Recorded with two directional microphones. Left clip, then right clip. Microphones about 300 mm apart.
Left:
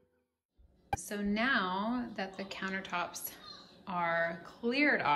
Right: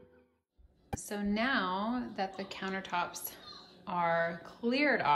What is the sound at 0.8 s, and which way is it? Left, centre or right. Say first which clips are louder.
Speech: left 2 dB; centre.